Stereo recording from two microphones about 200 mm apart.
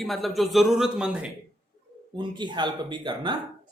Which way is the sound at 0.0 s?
Centre (ahead or behind).